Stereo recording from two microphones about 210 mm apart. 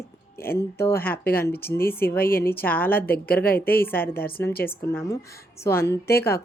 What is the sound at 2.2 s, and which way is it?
Speech, 45° left (ahead or behind).